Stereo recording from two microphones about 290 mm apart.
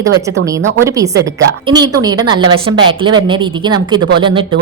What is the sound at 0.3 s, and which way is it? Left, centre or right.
A woman's voice, centre.